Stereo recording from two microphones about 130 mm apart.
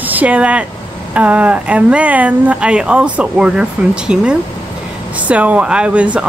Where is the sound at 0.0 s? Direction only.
10° right (ahead or behind).